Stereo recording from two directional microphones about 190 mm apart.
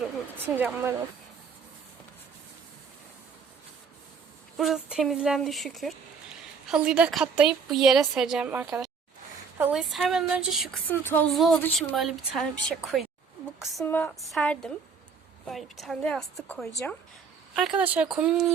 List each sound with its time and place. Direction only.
0.0 s a sound: 10° right (ahead or behind)
4.5 s a woman's voice: centre (ahead or behind)
10.8 s a woman's voice: 10° left (ahead or behind)
15.8 s a woman's voice: centre (ahead or behind)